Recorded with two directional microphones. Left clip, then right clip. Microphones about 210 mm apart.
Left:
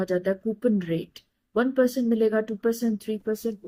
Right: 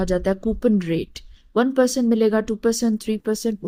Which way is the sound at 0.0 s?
50° right (ahead or behind).